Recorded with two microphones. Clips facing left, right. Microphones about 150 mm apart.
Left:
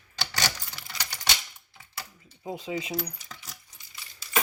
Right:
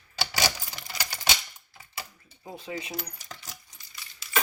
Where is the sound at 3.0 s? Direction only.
Centre (ahead or behind).